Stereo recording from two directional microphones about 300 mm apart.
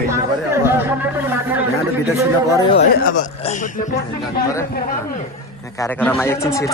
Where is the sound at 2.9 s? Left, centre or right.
Left.